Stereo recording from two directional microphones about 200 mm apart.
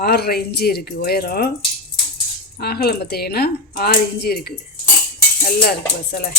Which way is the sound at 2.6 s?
50° left (ahead or behind).